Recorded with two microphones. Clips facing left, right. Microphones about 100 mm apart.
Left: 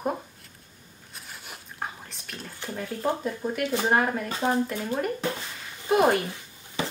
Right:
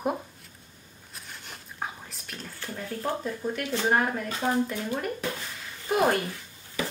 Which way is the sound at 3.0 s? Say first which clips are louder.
Left 3 dB; 15° left (ahead or behind).